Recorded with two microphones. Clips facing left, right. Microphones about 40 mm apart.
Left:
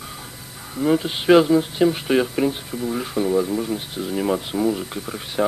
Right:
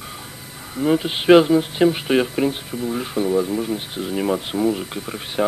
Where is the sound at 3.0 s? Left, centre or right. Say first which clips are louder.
Even; centre.